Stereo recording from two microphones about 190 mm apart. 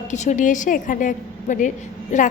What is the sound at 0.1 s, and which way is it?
A woman's voice, 40° left (ahead or behind).